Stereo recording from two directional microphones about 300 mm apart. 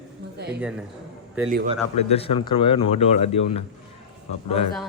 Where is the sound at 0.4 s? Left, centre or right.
Right.